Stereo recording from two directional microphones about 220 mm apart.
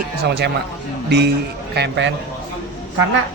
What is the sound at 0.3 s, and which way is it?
Speech, 50° right (ahead or behind).